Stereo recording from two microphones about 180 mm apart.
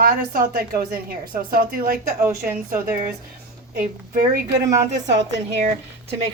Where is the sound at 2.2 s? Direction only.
10° right (ahead or behind).